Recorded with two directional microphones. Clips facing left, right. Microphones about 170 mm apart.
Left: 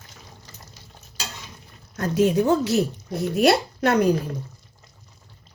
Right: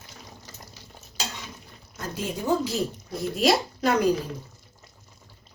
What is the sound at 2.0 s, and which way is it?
Speech, 70° left (ahead or behind).